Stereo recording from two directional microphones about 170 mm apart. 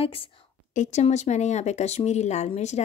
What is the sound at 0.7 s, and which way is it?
Speech, 45° left (ahead or behind).